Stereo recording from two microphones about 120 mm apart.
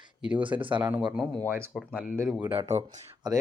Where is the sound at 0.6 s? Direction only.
45° right (ahead or behind).